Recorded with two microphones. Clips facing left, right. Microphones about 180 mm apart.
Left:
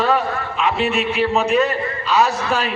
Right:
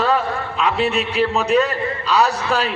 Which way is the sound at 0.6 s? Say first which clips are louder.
Even; 35° right (ahead or behind).